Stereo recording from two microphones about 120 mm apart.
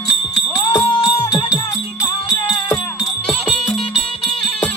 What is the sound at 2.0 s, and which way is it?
Music, 35° left (ahead or behind).